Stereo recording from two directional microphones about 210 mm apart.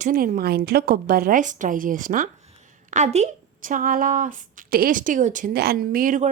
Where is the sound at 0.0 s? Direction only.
40° right (ahead or behind).